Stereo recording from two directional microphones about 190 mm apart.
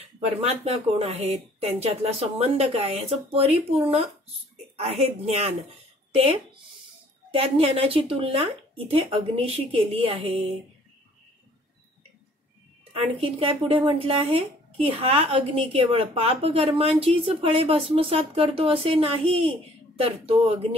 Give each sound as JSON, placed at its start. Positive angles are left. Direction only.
{"t": 0.4, "sound": "speech", "side_deg": -35}
{"t": 5.0, "sound": "speech", "side_deg": -35}
{"t": 12.9, "sound": "speech", "side_deg": -30}